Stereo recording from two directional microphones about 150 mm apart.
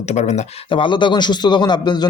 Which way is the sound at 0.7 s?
35° left (ahead or behind).